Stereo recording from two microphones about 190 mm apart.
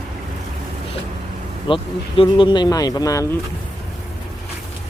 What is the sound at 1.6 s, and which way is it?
Speech, 25° left (ahead or behind).